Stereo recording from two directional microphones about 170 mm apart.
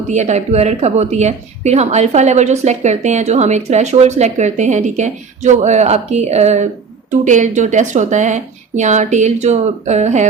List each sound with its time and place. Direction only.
0.1 s a woman's voice: 40° right (ahead or behind)